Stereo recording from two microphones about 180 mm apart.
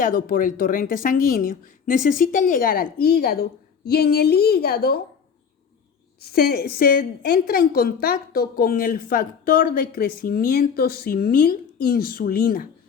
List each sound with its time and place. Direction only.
0.0 s a woman's voice: 50° left (ahead or behind)
6.1 s a woman's voice: 60° left (ahead or behind)